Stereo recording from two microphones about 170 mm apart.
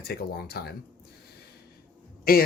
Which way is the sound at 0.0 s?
65° left (ahead or behind).